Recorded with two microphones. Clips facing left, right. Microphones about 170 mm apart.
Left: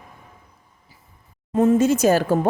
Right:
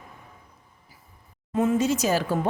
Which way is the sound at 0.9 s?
25° left (ahead or behind).